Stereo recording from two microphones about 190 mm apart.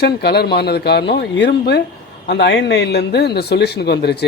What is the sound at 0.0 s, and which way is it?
Speech, 60° left (ahead or behind).